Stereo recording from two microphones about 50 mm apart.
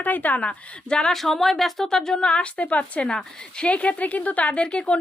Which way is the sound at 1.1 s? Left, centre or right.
Centre.